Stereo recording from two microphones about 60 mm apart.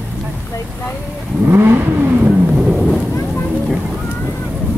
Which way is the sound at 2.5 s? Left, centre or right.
Centre.